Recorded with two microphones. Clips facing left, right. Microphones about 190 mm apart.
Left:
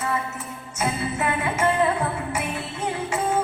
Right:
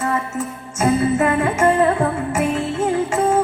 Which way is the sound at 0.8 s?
45° right (ahead or behind).